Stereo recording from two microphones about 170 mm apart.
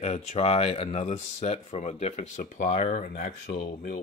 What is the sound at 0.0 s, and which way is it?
Speech, 40° left (ahead or behind).